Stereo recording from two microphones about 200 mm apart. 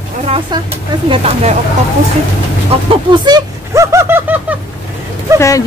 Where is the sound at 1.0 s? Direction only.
30° right (ahead or behind).